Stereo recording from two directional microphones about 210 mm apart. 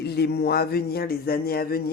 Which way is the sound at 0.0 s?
50° left (ahead or behind).